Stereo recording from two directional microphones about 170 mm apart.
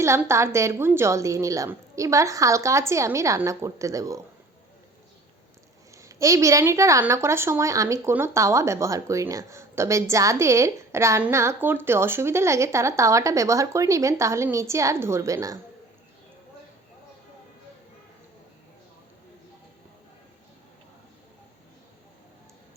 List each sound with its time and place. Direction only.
0.0 s a woman's voice: 15° right (ahead or behind)
5.9 s a woman's voice: 20° right (ahead or behind)